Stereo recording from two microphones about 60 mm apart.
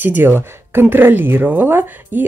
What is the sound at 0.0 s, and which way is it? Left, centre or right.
Speech, right.